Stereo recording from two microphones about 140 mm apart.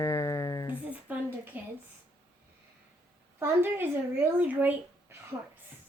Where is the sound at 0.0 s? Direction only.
20° left (ahead or behind).